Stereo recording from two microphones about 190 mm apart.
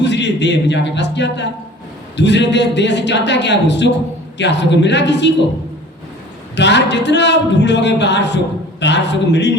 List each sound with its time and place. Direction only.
0.0 s a man's voice: 65° left (ahead or behind)
6.6 s a man's voice: 65° left (ahead or behind)